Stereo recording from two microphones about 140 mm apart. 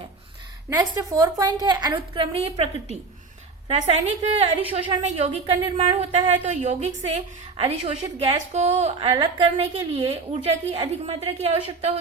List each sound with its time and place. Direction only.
0.7 s a woman's voice: 25° right (ahead or behind); by 2.6 s 45° right (ahead or behind)
3.7 s a woman's voice: 50° right (ahead or behind)